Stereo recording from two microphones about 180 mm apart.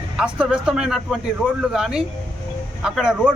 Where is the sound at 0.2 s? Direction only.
5° right (ahead or behind).